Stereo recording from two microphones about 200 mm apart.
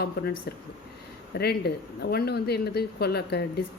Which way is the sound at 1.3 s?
55° left (ahead or behind).